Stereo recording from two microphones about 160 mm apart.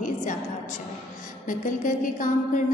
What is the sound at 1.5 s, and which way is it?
A woman's voice, 55° left (ahead or behind).